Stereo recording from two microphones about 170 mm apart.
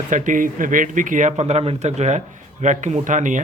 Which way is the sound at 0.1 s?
50° right (ahead or behind).